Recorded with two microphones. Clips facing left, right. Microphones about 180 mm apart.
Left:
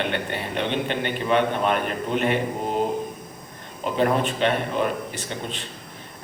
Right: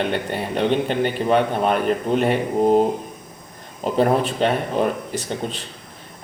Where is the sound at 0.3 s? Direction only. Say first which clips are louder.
Right 6 dB; 40° right (ahead or behind).